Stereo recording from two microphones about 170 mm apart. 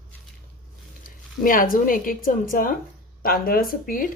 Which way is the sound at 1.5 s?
55° left (ahead or behind).